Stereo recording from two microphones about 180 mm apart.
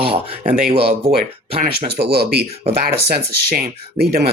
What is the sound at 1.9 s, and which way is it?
Speech, 60° right (ahead or behind).